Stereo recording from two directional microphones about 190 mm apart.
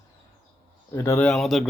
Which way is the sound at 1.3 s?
Centre (ahead or behind).